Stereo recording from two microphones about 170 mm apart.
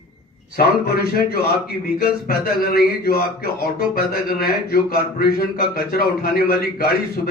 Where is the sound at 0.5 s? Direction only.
65° left (ahead or behind).